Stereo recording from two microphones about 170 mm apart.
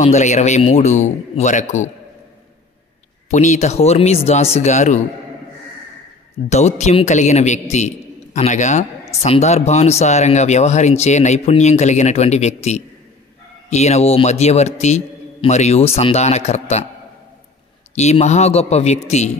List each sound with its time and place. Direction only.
0.0 s speech: 45° left (ahead or behind)
3.3 s speech: 45° left (ahead or behind)
6.5 s a man's voice: 40° left (ahead or behind)
13.7 s speech: 40° left (ahead or behind)
17.9 s speech: 40° left (ahead or behind)